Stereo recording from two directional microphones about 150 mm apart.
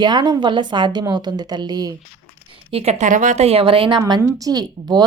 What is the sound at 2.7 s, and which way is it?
Speech, 40° right (ahead or behind).